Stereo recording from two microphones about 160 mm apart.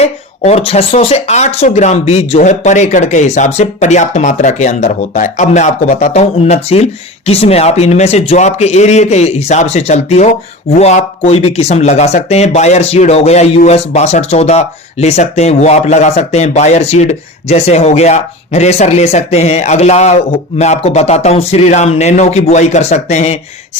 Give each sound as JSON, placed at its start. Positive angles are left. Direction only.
{"t": 0.0, "sound": "speech", "side_deg": 40}